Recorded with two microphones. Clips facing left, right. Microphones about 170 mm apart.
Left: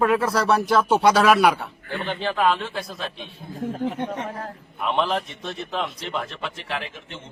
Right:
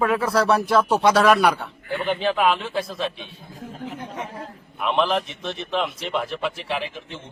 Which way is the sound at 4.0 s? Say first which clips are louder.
Left 4 dB; 70° left (ahead or behind).